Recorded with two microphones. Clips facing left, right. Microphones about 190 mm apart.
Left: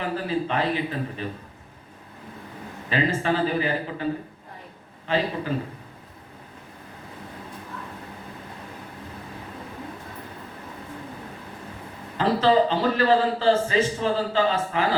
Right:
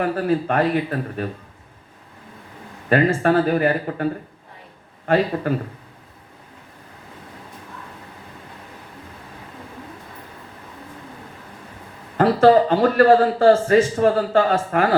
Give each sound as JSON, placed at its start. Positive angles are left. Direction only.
{"t": 0.0, "sound": "a man's voice", "side_deg": -50}
{"t": 2.9, "sound": "a man's voice", "side_deg": -55}
{"t": 12.1, "sound": "a man's voice", "side_deg": -55}